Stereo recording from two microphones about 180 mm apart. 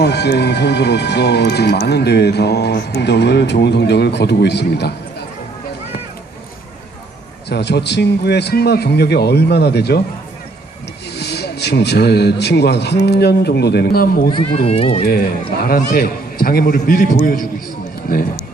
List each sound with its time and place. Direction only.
0.0 s speech: 65° left (ahead or behind)
7.5 s speech: 70° left (ahead or behind)
11.1 s speech: 65° left (ahead or behind)
14.3 s speech: 25° left (ahead or behind)
15.0 s a man's voice: 60° left (ahead or behind)